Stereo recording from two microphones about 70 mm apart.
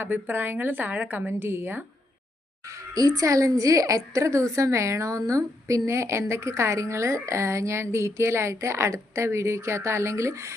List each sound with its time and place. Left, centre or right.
0.0 s a woman's voice: right
2.6 s a child's voice: right